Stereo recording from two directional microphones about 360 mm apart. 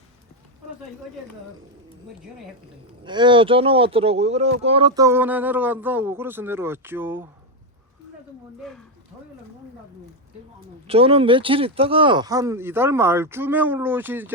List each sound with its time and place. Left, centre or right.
3.0 s speech: centre
10.8 s speech: centre